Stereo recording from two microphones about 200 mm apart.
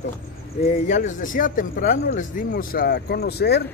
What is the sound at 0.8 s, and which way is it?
Speech, 40° left (ahead or behind).